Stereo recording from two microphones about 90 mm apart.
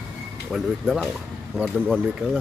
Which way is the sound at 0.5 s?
5° right (ahead or behind).